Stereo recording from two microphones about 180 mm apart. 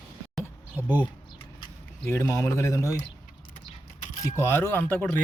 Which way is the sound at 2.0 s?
15° left (ahead or behind).